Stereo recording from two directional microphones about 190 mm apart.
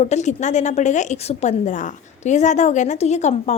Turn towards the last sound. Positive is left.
turn(degrees=35)  # may be behind; listen again after turning